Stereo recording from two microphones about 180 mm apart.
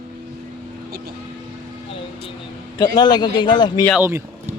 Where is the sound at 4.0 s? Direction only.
10° right (ahead or behind).